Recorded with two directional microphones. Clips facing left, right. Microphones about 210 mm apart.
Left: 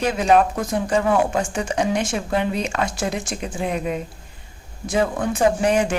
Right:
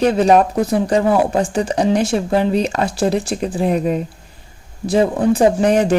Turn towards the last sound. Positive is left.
turn(degrees=-35)  # may be behind; listen again after turning